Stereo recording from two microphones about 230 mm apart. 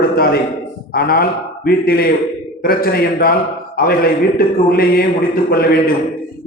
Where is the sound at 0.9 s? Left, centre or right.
Left.